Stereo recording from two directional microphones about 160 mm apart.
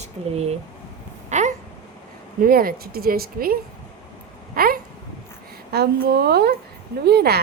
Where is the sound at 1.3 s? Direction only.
50° right (ahead or behind).